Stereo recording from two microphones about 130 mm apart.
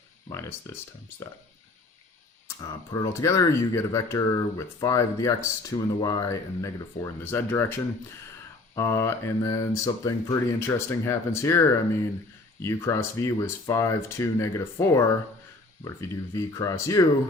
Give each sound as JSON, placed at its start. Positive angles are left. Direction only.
{"t": 0.3, "sound": "speech", "side_deg": 20}
{"t": 2.9, "sound": "speech", "side_deg": 25}
{"t": 12.6, "sound": "speech", "side_deg": 20}